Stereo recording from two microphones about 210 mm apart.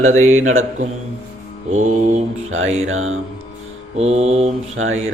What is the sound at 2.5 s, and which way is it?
Mantra, 70° right (ahead or behind).